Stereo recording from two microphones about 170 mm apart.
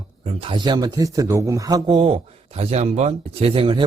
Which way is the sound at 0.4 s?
25° right (ahead or behind).